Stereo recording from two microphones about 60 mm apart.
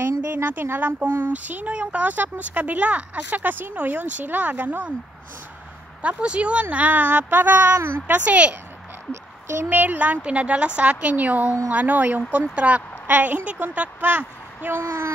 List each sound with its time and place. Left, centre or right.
0.3 s speech: right
6.0 s speech: centre
9.1 s speech: right
9.7 s speech: right